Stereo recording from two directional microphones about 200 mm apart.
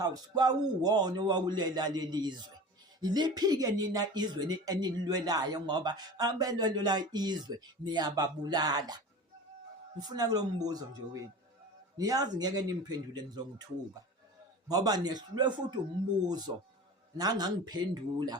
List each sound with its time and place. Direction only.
0.0 s speech: 20° right (ahead or behind)
10.0 s speech: 20° right (ahead or behind)
14.7 s speech: 20° right (ahead or behind)